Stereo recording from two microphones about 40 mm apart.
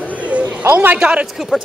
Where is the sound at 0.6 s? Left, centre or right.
Right.